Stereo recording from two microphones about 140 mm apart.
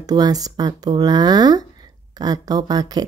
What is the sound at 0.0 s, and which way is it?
Speech, 30° right (ahead or behind).